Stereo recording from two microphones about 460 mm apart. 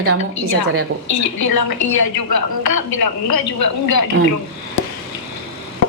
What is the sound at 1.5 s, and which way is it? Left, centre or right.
A woman's voice, left.